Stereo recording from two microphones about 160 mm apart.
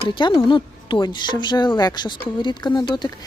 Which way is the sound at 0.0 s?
30° left (ahead or behind).